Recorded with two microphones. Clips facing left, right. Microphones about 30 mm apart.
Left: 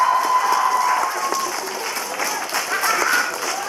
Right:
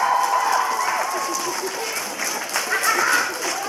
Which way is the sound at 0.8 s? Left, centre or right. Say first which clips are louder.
Left 3 dB; centre.